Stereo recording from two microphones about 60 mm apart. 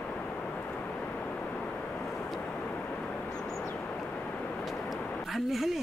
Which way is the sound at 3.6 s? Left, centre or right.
Left.